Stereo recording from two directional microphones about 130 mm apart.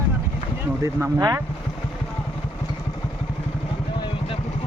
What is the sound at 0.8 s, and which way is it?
Speech, 25° right (ahead or behind).